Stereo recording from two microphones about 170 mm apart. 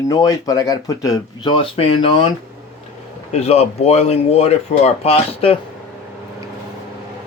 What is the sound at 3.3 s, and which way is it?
Speech, 35° left (ahead or behind).